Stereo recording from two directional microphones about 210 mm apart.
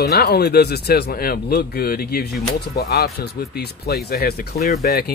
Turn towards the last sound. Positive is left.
turn(degrees=50)  # may be behind; listen again after turning